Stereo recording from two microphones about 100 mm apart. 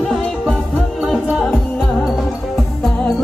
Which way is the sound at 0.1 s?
Centre (ahead or behind).